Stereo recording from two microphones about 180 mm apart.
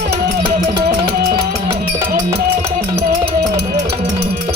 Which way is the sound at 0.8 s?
65° right (ahead or behind).